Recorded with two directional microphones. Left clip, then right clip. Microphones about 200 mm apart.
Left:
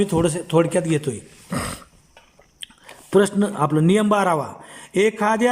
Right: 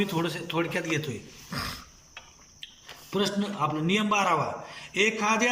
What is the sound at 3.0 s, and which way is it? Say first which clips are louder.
Speech: left 11 dB; 40° left (ahead or behind).